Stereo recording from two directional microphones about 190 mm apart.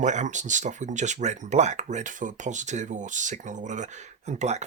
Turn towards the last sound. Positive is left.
turn(degrees=-35)  # may be behind; listen again after turning